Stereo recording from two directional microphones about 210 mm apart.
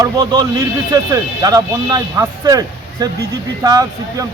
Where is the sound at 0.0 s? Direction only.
20° right (ahead or behind).